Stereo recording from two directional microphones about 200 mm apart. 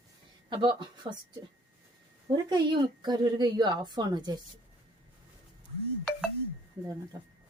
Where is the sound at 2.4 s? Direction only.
20° right (ahead or behind).